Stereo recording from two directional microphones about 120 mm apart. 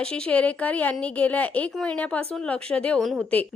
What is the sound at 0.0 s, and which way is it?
A woman's voice, 10° left (ahead or behind).